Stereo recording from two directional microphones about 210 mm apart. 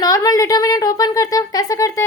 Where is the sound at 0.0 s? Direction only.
15° left (ahead or behind).